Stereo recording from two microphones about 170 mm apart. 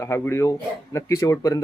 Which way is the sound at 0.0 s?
15° left (ahead or behind).